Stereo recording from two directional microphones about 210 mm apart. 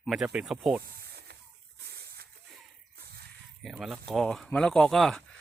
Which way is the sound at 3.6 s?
Centre (ahead or behind).